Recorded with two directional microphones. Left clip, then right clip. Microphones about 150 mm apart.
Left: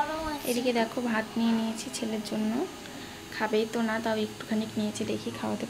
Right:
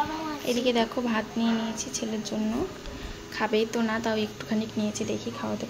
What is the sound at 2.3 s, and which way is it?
Speech, 5° left (ahead or behind).